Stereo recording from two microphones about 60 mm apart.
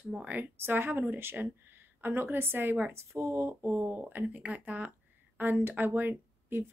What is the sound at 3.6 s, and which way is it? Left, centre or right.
Speech, right.